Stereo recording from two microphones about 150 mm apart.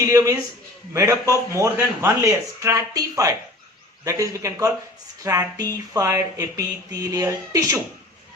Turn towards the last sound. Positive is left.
turn(degrees=-20)  # may be behind; listen again after turning